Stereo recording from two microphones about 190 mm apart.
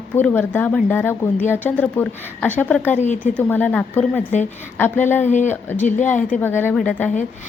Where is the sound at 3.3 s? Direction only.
5° left (ahead or behind).